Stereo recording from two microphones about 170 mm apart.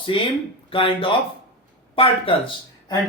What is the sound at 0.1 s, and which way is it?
Speech, 30° left (ahead or behind).